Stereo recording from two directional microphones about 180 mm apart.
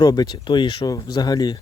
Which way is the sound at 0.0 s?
20° left (ahead or behind).